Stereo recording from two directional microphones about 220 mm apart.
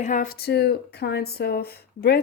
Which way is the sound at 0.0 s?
35° left (ahead or behind).